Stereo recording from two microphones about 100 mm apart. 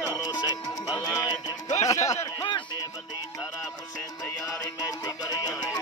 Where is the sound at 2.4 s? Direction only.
50° left (ahead or behind).